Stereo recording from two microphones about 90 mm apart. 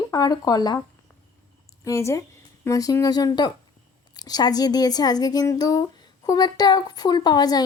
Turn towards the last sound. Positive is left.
turn(degrees=45)  # may be behind; listen again after turning